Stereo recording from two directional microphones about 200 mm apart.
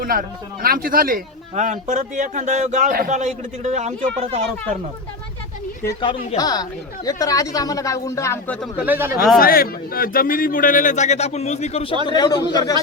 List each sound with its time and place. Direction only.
0.0 s speech: 45° right (ahead or behind); by 4.4 s 30° right (ahead or behind)
5.8 s a man's voice: 25° left (ahead or behind)
8.6 s speech: 10° right (ahead or behind)
9.4 s a man's voice: 50° left (ahead or behind); by 12.7 s 20° left (ahead or behind)